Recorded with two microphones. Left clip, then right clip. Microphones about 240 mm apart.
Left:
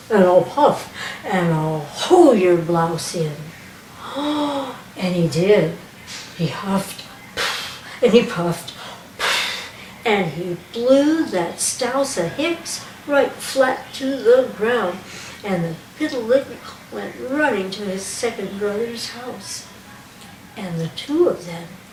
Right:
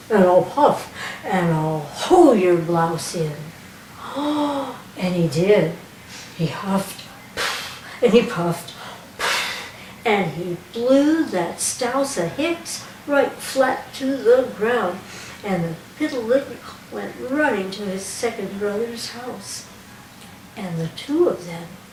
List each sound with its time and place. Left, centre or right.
0.1 s a woman's voice: centre
1.5 s speech: left
1.9 s a woman's voice: centre
4.0 s gasp: centre
4.9 s a woman's voice: centre
6.1 s a sound: centre
10.8 s a woman's voice: centre